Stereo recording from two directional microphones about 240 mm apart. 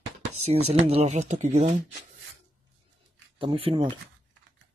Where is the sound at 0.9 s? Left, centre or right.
Right.